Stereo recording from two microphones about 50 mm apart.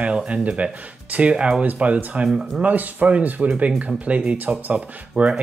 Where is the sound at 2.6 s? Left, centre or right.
Right.